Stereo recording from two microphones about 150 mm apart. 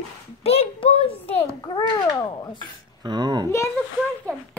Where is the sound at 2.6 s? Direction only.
30° right (ahead or behind).